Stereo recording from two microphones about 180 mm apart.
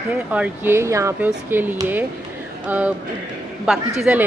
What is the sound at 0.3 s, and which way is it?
A man's voice, 10° right (ahead or behind).